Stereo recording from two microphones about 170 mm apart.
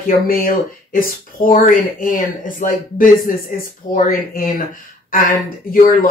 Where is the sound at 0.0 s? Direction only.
55° left (ahead or behind).